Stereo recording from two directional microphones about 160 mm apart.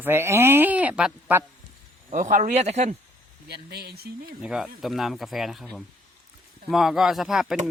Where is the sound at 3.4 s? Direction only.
85° right.